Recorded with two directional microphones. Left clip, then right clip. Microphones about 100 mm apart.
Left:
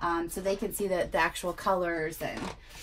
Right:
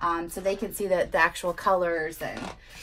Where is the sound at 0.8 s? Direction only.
45° right (ahead or behind).